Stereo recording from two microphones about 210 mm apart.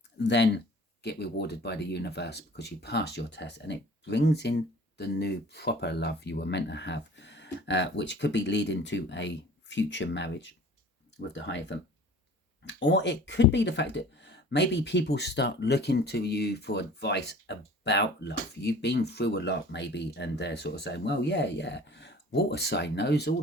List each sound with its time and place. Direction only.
0.2 s speech: 55° left (ahead or behind)